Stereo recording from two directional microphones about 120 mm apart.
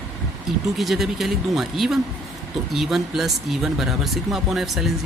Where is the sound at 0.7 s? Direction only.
Centre (ahead or behind).